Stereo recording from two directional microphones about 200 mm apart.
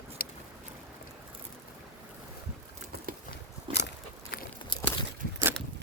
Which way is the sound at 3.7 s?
60° left (ahead or behind).